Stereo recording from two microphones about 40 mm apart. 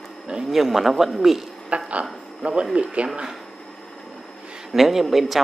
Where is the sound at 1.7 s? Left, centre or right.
Right.